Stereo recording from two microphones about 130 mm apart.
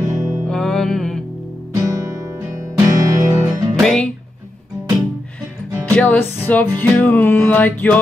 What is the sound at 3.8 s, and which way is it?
Speech, 5° left (ahead or behind).